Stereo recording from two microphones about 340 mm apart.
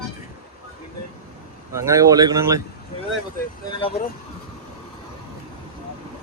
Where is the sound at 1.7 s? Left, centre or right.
Centre.